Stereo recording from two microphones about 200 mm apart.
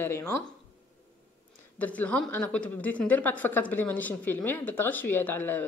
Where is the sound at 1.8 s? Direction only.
5° left (ahead or behind).